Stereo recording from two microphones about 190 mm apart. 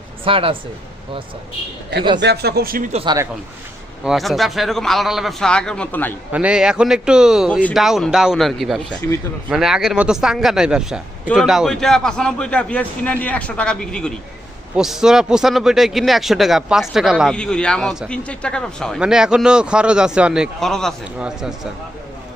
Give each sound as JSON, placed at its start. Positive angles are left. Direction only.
{"t": 0.3, "sound": "speech", "side_deg": -30}
{"t": 2.2, "sound": "speech", "side_deg": -60}
{"t": 2.9, "sound": "speech", "side_deg": -30}
{"t": 4.0, "sound": "a man's voice", "side_deg": 0}
{"t": 6.3, "sound": "a man's voice", "side_deg": -5}